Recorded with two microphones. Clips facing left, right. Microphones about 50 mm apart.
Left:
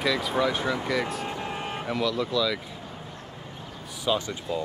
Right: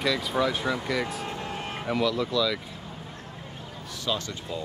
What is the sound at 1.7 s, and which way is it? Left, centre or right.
Speech, centre.